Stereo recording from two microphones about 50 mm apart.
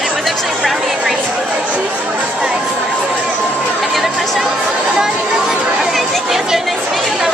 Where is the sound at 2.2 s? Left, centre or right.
Centre.